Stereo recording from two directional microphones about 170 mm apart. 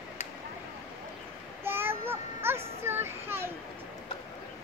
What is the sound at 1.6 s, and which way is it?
Child singing, 15° right (ahead or behind).